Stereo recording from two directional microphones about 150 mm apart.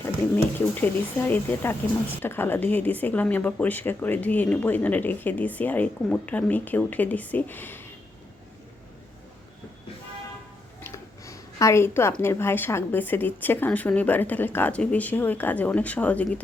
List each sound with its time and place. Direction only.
0.6 s speech: 15° left (ahead or behind)
10.8 s a sound: 20° left (ahead or behind)
12.2 s speech: 15° left (ahead or behind)